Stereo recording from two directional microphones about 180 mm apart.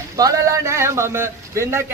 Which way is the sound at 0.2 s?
20° right (ahead or behind).